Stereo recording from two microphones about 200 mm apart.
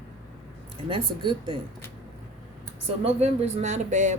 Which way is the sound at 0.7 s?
25° right (ahead or behind).